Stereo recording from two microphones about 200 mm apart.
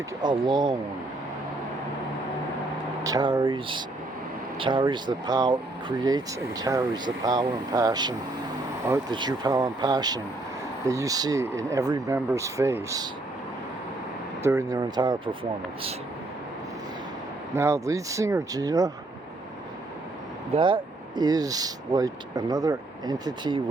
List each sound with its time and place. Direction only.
0.2 s speech: 20° right (ahead or behind)
3.0 s speech: 20° right (ahead or behind)
14.4 s speech: 15° right (ahead or behind)
17.5 s speech: 15° right (ahead or behind)
20.6 s speech: 25° right (ahead or behind)